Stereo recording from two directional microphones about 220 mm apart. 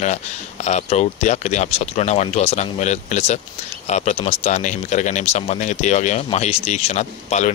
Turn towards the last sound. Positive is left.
turn(degrees=30)  # may be behind; listen again after turning